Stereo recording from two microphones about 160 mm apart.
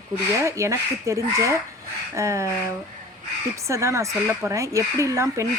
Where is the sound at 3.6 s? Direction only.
20° right (ahead or behind).